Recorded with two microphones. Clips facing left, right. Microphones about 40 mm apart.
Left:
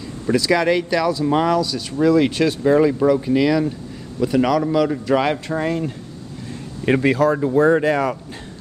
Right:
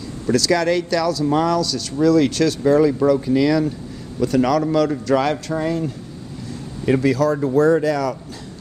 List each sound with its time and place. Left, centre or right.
0.3 s a man's voice: left
7.3 s speech: left